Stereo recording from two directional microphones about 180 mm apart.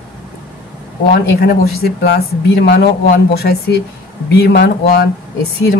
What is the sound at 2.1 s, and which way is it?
A woman's voice, 70° left (ahead or behind).